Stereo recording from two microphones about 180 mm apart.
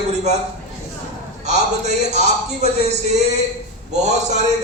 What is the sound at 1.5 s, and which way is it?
A man's voice, 40° right (ahead or behind).